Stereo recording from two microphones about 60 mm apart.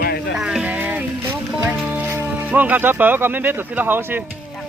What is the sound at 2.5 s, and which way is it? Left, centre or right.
Speech, right.